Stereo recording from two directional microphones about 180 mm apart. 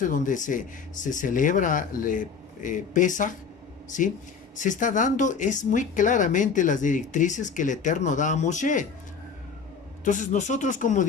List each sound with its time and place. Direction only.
0.0 s speech: 45° left (ahead or behind)
10.0 s speech: 45° left (ahead or behind)